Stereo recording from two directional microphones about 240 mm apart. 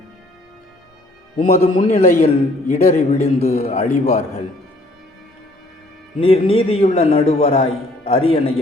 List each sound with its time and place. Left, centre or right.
1.4 s a man's voice: left
6.1 s a man's voice: left